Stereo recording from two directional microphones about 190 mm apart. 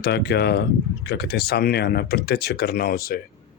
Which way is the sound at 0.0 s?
55° left (ahead or behind).